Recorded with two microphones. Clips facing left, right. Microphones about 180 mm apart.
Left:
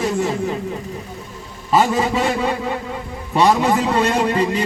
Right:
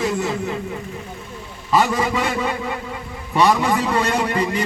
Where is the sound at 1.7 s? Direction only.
25° left (ahead or behind).